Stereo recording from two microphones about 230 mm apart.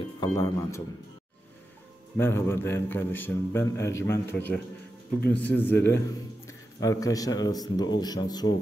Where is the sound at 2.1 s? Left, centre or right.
Centre.